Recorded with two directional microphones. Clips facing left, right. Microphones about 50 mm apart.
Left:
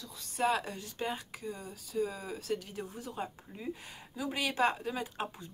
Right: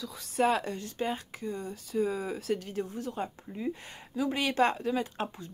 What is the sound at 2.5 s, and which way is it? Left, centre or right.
Speech, right.